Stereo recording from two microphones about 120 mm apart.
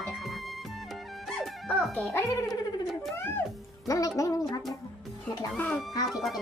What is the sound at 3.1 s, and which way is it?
Music, 20° left (ahead or behind).